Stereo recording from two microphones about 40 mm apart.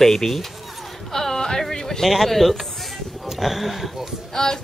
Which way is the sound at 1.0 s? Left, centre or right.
Centre.